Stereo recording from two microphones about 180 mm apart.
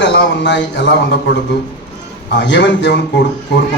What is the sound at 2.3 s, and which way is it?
A man's voice, 80° left.